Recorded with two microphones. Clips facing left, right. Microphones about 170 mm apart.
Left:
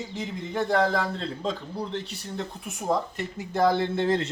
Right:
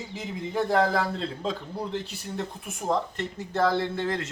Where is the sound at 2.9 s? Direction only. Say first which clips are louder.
Even; 10° left (ahead or behind).